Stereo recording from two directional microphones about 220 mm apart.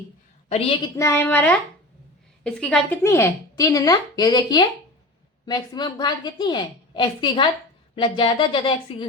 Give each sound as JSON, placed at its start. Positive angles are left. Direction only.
{"t": 0.4, "sound": "a woman's voice", "side_deg": 25}
{"t": 0.9, "sound": "a woman's voice", "side_deg": 10}